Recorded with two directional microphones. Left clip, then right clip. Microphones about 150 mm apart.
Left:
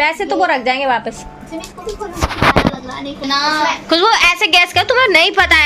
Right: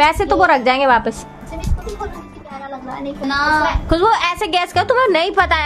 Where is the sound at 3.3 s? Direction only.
70° right (ahead or behind).